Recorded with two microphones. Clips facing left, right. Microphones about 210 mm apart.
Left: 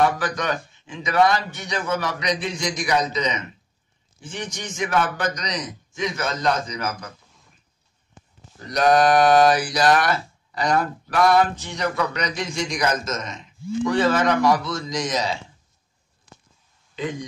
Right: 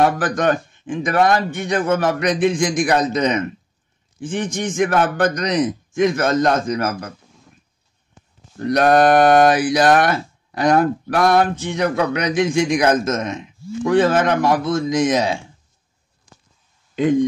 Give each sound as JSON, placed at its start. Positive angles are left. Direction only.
{"t": 0.0, "sound": "speech", "side_deg": -50}
{"t": 8.5, "sound": "speech", "side_deg": -60}